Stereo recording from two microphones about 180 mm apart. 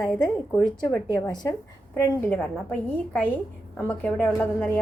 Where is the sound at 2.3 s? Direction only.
5° left (ahead or behind).